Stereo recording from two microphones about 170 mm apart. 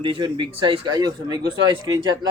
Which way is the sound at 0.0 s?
30° right (ahead or behind).